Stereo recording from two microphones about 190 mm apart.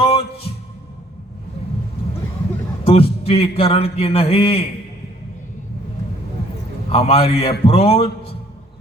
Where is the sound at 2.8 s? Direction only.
30° left (ahead or behind).